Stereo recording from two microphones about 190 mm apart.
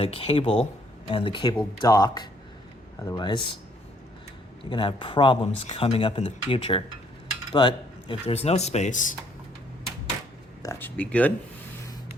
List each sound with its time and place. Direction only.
0.0 s speech: 30° left (ahead or behind)
4.7 s speech: 25° left (ahead or behind); by 9.1 s 40° left (ahead or behind)
10.6 s a sound: 15° left (ahead or behind)